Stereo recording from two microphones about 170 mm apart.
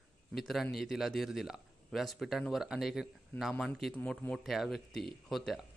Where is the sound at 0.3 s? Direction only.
Centre (ahead or behind).